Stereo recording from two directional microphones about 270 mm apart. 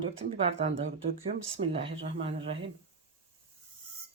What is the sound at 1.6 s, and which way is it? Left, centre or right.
Speech, right.